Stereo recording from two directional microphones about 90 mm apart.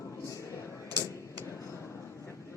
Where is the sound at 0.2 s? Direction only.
35° left (ahead or behind).